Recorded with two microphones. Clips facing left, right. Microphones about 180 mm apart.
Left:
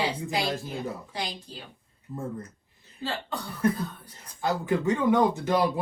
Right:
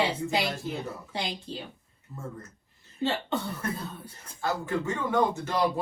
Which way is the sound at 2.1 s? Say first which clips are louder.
Left 8 dB; 20° left (ahead or behind).